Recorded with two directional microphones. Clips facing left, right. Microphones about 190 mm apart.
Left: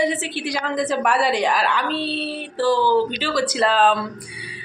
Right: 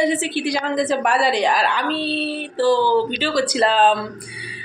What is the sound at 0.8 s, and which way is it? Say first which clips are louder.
Speech: left 1 dB; 25° right (ahead or behind).